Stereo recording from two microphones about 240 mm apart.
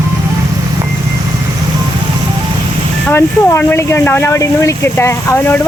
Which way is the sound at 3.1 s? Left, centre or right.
Centre.